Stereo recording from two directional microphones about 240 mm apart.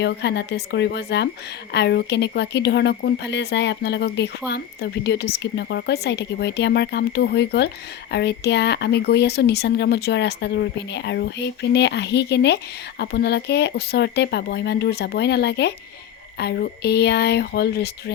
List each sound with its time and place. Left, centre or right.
0.0 s speech: left